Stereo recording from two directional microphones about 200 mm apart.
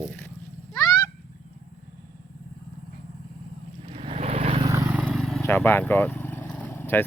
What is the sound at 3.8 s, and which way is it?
Vehicle, 25° right (ahead or behind).